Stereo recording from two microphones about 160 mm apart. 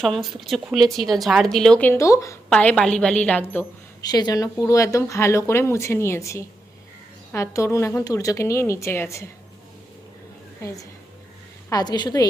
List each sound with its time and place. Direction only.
0.0 s speech: centre (ahead or behind)
4.0 s a woman's voice: 25° left (ahead or behind)
10.6 s a woman's voice: 20° left (ahead or behind)